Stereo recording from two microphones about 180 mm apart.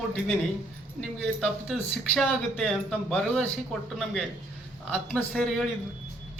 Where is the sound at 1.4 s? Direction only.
Centre (ahead or behind).